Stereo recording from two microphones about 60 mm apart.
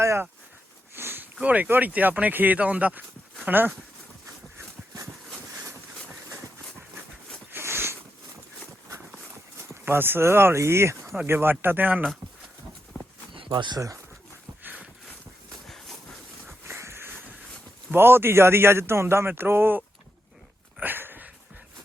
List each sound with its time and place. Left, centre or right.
0.9 s a sound: right
1.4 s speech: right
7.5 s a sound: right
9.8 s speech: right
11.3 s speech: right
13.7 s speech: right
16.6 s a sound: right
17.9 s speech: right
20.8 s dog: right